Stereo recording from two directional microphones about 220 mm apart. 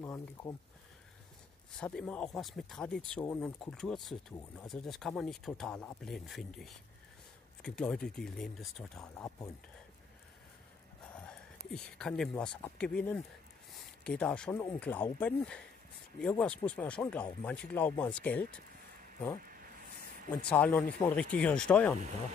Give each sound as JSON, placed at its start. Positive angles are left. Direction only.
{"t": 0.0, "sound": "speech", "side_deg": 15}
{"t": 1.8, "sound": "speech", "side_deg": 5}
{"t": 11.2, "sound": "speech", "side_deg": 5}
{"t": 19.4, "sound": "a sound", "side_deg": -40}
{"t": 20.2, "sound": "speech", "side_deg": 5}